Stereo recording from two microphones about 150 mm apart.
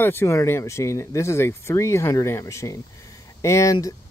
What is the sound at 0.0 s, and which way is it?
Speech, 15° left (ahead or behind).